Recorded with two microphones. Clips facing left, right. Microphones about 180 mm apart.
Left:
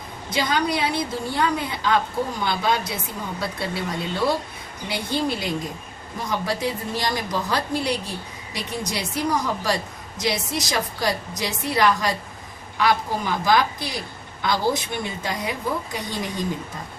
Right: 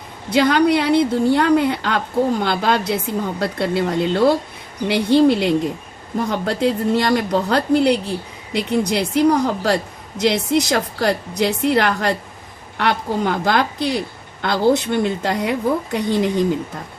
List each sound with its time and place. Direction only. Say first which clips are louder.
0.3 s a woman's voice: right 9 dB; 65° right (ahead or behind)